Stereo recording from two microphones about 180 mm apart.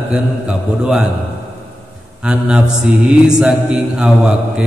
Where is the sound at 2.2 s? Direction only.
5° right (ahead or behind).